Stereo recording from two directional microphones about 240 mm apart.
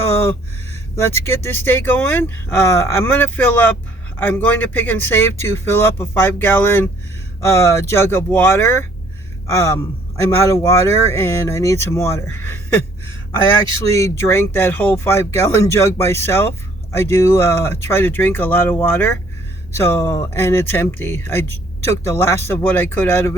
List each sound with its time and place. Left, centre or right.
1.2 s speech: centre
13.9 s speech: centre